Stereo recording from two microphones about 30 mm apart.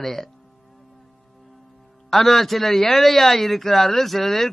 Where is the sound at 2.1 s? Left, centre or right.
Centre.